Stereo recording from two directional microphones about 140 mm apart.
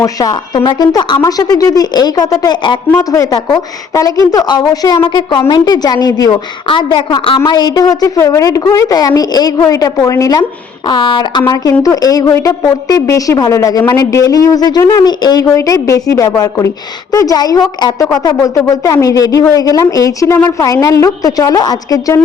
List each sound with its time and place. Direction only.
0.0 s a woman's voice: 25° left (ahead or behind)